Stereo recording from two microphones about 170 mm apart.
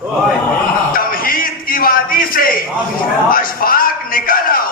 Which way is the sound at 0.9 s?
55° left (ahead or behind).